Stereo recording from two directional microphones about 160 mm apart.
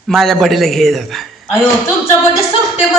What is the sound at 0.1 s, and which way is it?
A man's voice, centre (ahead or behind).